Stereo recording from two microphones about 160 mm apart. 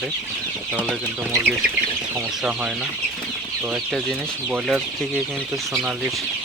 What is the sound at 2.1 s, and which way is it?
Speech, 5° right (ahead or behind).